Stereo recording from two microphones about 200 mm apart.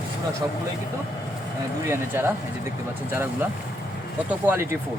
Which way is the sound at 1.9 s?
10° right (ahead or behind).